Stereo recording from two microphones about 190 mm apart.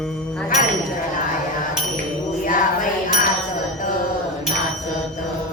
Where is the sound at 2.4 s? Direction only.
45° left (ahead or behind).